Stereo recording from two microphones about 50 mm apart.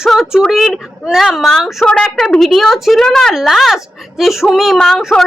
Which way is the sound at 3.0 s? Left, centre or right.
Centre.